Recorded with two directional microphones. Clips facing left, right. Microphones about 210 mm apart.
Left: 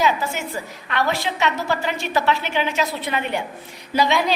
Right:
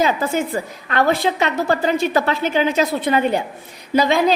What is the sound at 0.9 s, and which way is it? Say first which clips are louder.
A woman's voice: right 5 dB; 45° right (ahead or behind).